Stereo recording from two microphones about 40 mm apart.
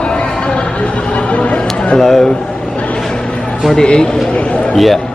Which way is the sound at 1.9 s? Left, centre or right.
Centre.